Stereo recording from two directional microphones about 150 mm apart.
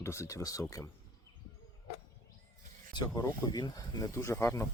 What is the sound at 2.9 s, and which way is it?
Speech, 30° left (ahead or behind).